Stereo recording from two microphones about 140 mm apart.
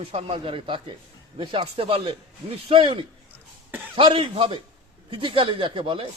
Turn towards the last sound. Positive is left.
turn(degrees=-40)  # may be behind; listen again after turning